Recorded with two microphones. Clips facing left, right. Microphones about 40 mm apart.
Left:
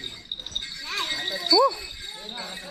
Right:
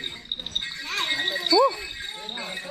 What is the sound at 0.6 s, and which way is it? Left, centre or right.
Music, right.